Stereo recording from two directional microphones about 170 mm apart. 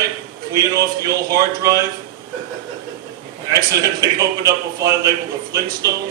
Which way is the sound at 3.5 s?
20° right (ahead or behind).